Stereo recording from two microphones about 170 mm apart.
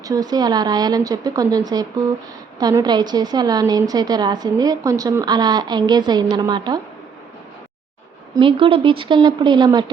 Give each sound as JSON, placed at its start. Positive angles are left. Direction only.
{"t": 0.0, "sound": "a woman's voice", "side_deg": -20}
{"t": 8.4, "sound": "a woman's voice", "side_deg": -30}